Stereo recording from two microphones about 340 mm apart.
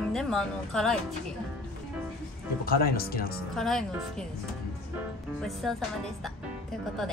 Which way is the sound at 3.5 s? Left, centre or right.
Centre.